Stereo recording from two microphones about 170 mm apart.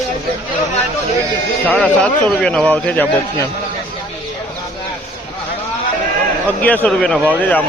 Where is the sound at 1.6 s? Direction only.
10° left (ahead or behind).